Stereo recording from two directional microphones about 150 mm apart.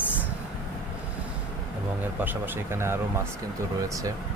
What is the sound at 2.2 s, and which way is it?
Speech, 15° right (ahead or behind).